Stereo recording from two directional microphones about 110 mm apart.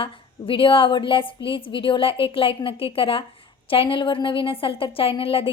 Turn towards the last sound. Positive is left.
turn(degrees=55)  # may be behind; listen again after turning